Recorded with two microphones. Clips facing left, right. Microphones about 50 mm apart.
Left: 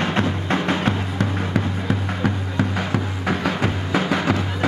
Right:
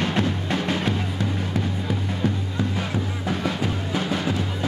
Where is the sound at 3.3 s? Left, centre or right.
Left.